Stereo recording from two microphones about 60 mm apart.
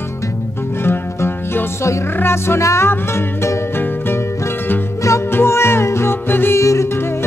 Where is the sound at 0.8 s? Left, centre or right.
Left.